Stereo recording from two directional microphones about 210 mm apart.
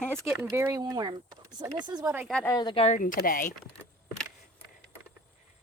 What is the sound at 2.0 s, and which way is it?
Speech, 10° right (ahead or behind).